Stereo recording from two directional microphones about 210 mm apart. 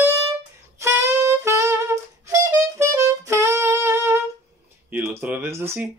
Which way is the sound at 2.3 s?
15° right (ahead or behind).